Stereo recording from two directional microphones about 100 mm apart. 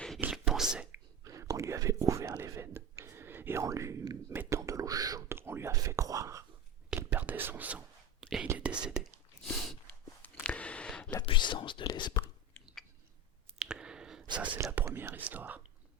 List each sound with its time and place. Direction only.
0.2 s whispering: 5° right (ahead or behind)
0.9 s whispering: 30° right (ahead or behind)
5.3 s whispering: 25° right (ahead or behind)
5.7 s whispering: 35° right (ahead or behind)
6.9 s whispering: 15° right (ahead or behind)
8.2 s whispering: 5° right (ahead or behind)
10.2 s a sound: 15° left (ahead or behind)
11.1 s whispering: 50° left (ahead or behind)
13.6 s clicking: 5° right (ahead or behind)
14.3 s whispering: 15° right (ahead or behind)
14.6 s whispering: 25° right (ahead or behind)